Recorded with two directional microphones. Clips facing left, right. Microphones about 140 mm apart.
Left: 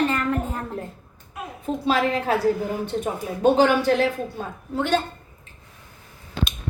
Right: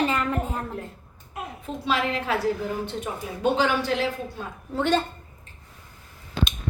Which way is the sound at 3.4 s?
45° left (ahead or behind).